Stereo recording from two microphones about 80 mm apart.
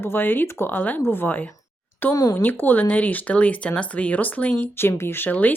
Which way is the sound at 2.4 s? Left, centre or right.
Left.